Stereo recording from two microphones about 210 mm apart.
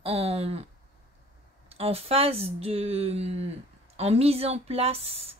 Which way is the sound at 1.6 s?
30° right (ahead or behind).